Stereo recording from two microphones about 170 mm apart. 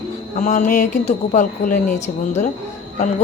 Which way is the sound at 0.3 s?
45° left (ahead or behind).